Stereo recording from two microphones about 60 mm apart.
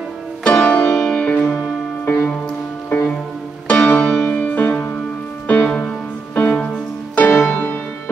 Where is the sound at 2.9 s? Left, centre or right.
Left.